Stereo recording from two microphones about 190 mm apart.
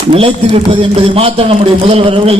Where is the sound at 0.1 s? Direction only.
30° right (ahead or behind).